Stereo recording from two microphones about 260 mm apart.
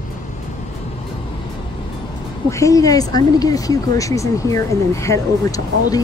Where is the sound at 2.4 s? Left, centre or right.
Centre.